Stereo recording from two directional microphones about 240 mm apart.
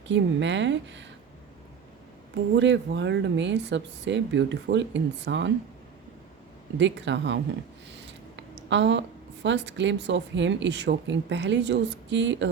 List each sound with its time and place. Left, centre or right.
0.1 s speech: right
2.6 s speech: right
6.7 s a woman's voice: right